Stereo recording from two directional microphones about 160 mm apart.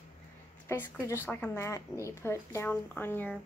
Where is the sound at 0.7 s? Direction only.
15° left (ahead or behind).